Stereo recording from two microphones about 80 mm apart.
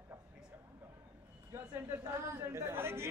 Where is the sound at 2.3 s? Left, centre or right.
Right.